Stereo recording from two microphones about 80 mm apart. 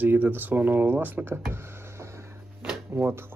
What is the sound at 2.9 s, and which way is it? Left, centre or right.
Speech, right.